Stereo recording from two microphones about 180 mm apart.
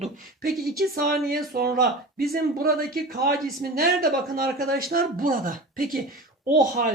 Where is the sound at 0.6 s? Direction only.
55° right (ahead or behind).